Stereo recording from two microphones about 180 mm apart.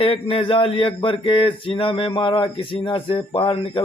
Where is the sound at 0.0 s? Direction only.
30° left (ahead or behind).